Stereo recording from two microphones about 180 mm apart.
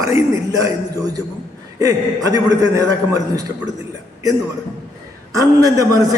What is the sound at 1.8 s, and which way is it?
A man's voice, 20° right (ahead or behind).